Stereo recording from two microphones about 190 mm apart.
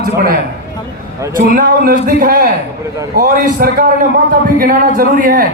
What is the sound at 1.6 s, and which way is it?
A man's voice, 50° right (ahead or behind).